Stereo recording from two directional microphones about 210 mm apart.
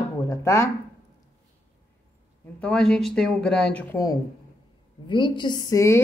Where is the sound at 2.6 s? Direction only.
5° left (ahead or behind).